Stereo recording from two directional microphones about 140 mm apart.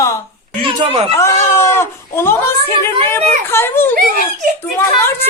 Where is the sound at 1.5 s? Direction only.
15° left (ahead or behind).